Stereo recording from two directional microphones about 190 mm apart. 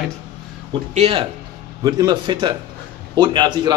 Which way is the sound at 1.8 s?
20° right (ahead or behind).